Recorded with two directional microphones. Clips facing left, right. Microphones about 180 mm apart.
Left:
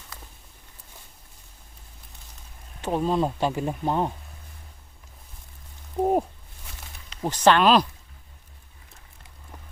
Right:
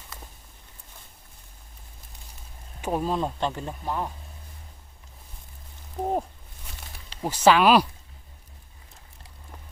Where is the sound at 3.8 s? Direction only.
25° left (ahead or behind).